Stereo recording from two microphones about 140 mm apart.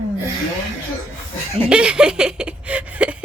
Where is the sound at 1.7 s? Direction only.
5° right (ahead or behind).